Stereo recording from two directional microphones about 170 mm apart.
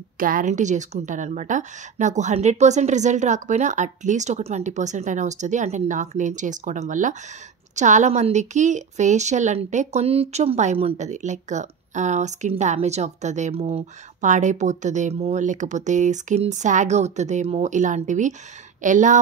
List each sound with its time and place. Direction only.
0.2 s a woman's voice: 55° right (ahead or behind)